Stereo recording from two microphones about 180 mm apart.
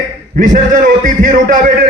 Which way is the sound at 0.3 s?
45° right (ahead or behind).